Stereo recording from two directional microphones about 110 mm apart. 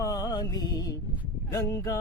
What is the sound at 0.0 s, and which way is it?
Music, 30° left (ahead or behind).